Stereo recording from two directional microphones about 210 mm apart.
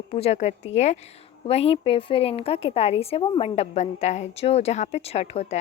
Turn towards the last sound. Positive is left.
turn(degrees=30)  # may be behind; listen again after turning